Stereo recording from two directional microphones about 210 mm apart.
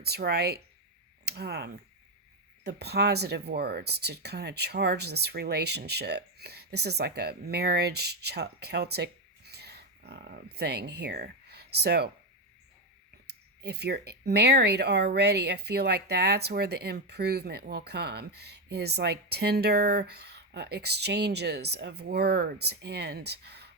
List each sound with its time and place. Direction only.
0.0 s speech: 50° right (ahead or behind)
13.2 s speech: 50° right (ahead or behind)